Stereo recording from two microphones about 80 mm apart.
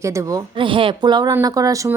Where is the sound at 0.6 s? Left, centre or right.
Right.